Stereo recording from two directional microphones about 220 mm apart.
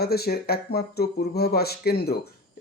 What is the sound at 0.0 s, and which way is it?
Speech, 45° left (ahead or behind).